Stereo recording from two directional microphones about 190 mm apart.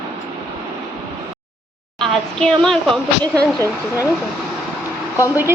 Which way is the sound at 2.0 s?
5° left (ahead or behind).